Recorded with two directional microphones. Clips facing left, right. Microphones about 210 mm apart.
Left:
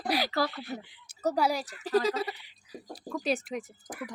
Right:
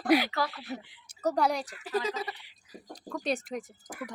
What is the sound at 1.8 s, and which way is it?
Speech, 35° left (ahead or behind).